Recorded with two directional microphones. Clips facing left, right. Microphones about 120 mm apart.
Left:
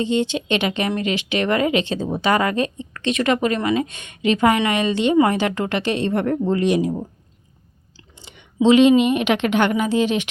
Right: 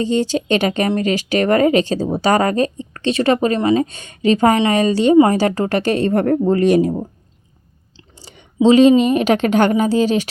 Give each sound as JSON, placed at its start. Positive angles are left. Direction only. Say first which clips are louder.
{"t": 0.0, "sound": "a woman's voice", "louder": "right 3 dB", "side_deg": -40}
{"t": 8.2, "sound": "a sound", "louder": "right 3 dB", "side_deg": -40}
{"t": 8.6, "sound": "a woman's voice", "louder": "right 3 dB", "side_deg": -35}